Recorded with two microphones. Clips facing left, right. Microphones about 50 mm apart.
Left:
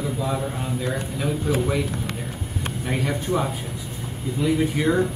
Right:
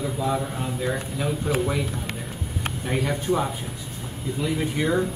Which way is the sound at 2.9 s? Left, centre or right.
Centre.